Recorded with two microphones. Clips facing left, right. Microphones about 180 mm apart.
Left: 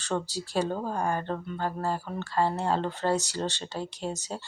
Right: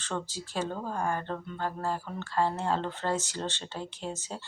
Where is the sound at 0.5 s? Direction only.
15° left (ahead or behind).